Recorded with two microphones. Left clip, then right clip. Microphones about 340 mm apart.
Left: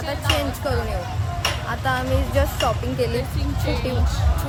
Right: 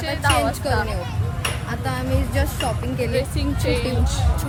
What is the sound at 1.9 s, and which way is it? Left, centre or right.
Speech, centre.